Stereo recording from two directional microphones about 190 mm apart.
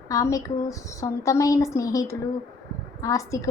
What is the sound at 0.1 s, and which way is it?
A woman's voice, 15° left (ahead or behind).